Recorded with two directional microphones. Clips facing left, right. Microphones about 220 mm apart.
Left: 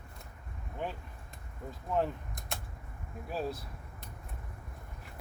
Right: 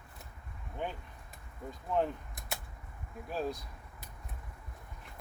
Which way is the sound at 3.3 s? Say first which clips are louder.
Even; 5° left (ahead or behind).